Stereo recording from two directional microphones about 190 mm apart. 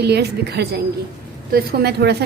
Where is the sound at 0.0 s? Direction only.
60° right (ahead or behind).